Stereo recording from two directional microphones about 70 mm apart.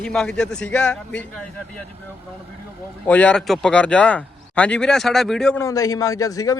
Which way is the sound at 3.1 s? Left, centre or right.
Centre.